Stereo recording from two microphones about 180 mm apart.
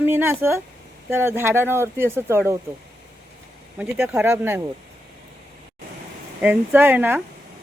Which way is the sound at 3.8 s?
10° right (ahead or behind).